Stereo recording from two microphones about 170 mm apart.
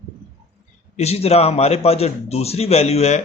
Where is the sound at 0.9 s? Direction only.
40° left (ahead or behind).